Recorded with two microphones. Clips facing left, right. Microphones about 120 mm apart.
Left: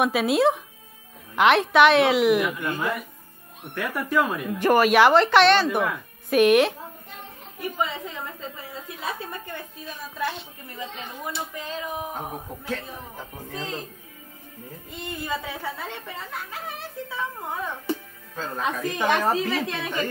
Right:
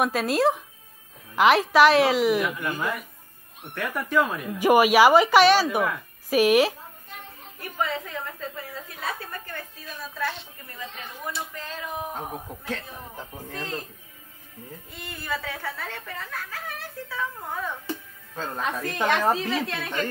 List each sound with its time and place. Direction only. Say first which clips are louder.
0.0 s a woman's voice: left 2 dB; centre (ahead or behind)
3.9 s a woman's voice: even; 5° left (ahead or behind)
4.6 s a woman's voice: right 1 dB; 10° right (ahead or behind)
7.7 s speech: right 2 dB; 20° left (ahead or behind)
10.8 s speech: left 3 dB; 25° left (ahead or behind)
14.9 s speech: left 3 dB; 20° left (ahead or behind)